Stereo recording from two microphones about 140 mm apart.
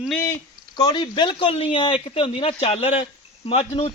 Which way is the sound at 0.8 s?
30° left (ahead or behind).